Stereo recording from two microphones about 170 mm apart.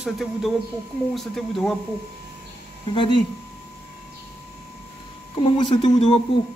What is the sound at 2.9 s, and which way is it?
Speech, 30° left (ahead or behind).